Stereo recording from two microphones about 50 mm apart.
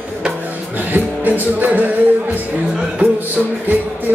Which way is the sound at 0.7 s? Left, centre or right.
Right.